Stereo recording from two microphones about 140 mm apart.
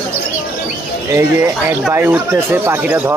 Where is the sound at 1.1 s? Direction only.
20° right (ahead or behind).